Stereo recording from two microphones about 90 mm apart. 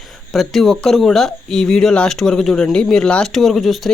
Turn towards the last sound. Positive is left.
turn(degrees=0)  # may be behind; listen again after turning